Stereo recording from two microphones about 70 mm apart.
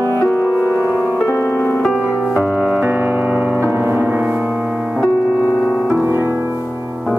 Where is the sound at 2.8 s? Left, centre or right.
Right.